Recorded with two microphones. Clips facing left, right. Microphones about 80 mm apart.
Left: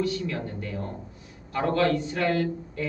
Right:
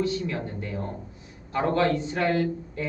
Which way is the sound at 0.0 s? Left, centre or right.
Right.